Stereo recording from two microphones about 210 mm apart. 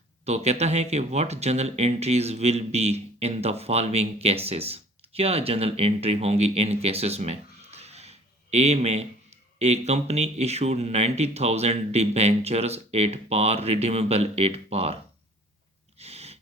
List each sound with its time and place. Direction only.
0.3 s speech: 30° right (ahead or behind)
16.0 s sneeze: 30° right (ahead or behind)